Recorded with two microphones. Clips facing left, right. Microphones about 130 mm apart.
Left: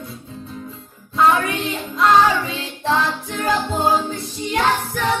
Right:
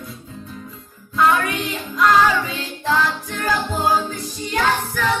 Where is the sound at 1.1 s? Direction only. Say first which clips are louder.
Left 1 dB; 25° left (ahead or behind).